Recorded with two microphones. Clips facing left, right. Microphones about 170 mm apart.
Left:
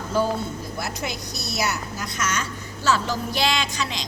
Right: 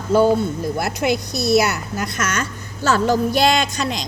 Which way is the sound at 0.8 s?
65° right (ahead or behind).